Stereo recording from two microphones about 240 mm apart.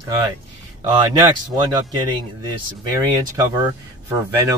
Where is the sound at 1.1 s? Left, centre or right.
Centre.